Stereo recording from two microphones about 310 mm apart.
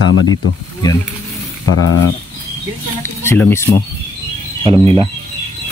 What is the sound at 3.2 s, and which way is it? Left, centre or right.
Speech, centre.